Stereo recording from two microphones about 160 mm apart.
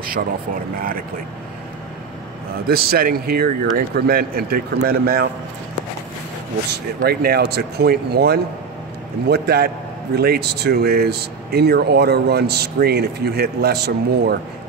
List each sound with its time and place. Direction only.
2.7 s speech: 70° right (ahead or behind)
6.7 s speech: 80° right